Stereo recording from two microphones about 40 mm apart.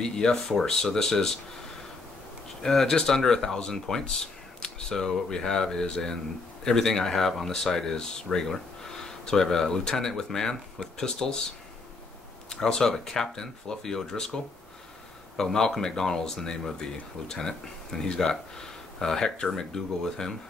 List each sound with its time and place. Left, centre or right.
0.0 s speech: centre
2.6 s speech: centre
12.4 s speech: centre